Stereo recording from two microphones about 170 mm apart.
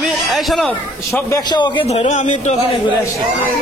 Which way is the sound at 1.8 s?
40° left (ahead or behind).